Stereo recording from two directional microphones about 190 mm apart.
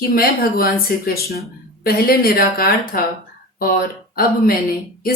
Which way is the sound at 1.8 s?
50° left (ahead or behind).